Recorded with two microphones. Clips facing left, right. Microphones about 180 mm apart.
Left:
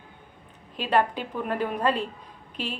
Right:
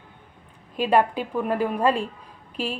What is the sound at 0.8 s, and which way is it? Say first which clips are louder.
Speech: right 4 dB; 10° right (ahead or behind).